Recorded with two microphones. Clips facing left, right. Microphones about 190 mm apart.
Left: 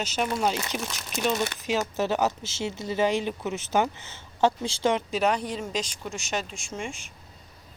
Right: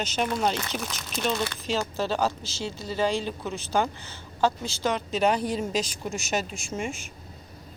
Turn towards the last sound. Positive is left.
turn(degrees=-5)  # may be behind; listen again after turning